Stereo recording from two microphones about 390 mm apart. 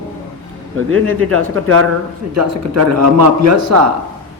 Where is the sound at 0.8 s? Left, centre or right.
Right.